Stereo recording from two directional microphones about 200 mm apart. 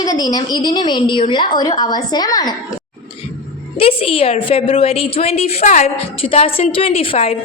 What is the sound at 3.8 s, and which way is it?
A child's voice, 30° left (ahead or behind).